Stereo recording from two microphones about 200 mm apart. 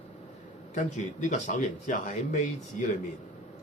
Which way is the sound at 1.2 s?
40° left (ahead or behind).